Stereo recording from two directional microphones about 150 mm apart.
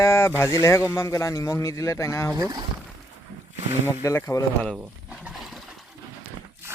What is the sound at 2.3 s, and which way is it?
Speech, 25° right (ahead or behind).